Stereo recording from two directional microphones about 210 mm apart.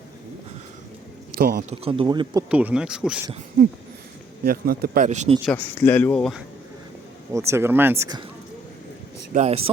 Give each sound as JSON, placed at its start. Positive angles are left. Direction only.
{"t": 1.4, "sound": "a man's voice", "side_deg": -45}
{"t": 1.7, "sound": "speech", "side_deg": -25}
{"t": 2.5, "sound": "speech", "side_deg": -5}
{"t": 4.4, "sound": "speech", "side_deg": -45}
{"t": 5.5, "sound": "speech", "side_deg": 10}
{"t": 7.3, "sound": "speech", "side_deg": -10}
{"t": 9.3, "sound": "speech", "side_deg": -35}